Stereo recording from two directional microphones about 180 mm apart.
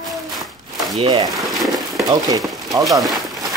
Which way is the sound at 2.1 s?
20° right (ahead or behind).